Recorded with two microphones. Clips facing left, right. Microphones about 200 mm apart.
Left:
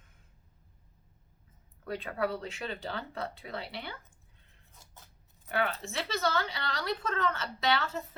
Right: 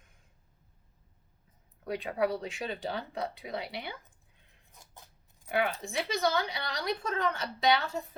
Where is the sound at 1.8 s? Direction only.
15° right (ahead or behind).